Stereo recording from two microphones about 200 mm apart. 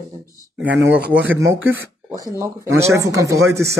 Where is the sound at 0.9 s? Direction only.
55° right (ahead or behind).